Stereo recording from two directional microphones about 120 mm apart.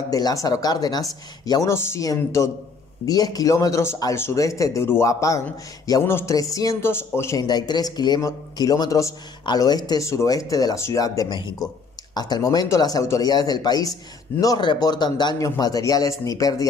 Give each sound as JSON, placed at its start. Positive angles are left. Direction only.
{"t": 0.1, "sound": "a man's voice", "side_deg": 30}
{"t": 7.4, "sound": "a man's voice", "side_deg": 35}